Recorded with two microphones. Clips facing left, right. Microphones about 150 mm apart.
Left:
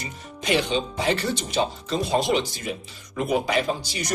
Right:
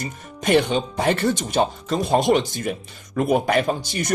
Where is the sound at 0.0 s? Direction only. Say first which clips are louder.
Right 6 dB; 50° right (ahead or behind).